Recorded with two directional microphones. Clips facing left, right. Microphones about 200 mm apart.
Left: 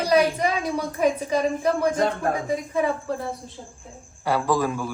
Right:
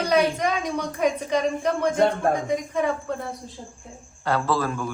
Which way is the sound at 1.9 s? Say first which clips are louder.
Right 3 dB; 25° right (ahead or behind).